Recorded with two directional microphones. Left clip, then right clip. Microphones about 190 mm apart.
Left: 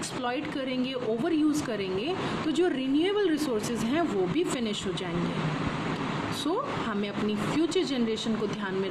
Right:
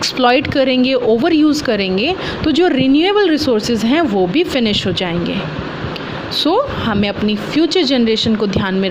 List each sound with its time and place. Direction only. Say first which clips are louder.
0.0 s speech: right 19 dB; 45° right (ahead or behind)
6.4 s speech: right 17 dB; 40° right (ahead or behind)